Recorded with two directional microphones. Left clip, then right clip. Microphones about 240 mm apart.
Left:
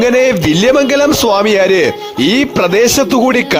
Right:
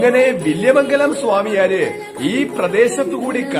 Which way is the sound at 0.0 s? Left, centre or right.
Left.